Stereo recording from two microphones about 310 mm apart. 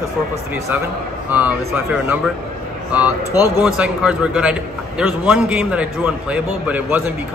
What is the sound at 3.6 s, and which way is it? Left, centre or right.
A man's voice, centre.